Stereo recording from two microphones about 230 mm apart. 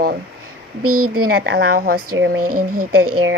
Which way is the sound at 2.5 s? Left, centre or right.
Right.